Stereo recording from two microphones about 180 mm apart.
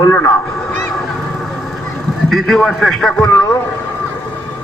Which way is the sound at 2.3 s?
Centre (ahead or behind).